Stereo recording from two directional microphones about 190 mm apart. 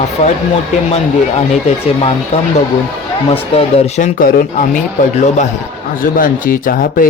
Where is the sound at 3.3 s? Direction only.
30° left (ahead or behind); by 4.8 s 50° left (ahead or behind).